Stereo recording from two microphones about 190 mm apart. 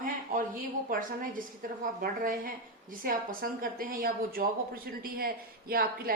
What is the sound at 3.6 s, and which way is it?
A woman's voice, 50° right (ahead or behind).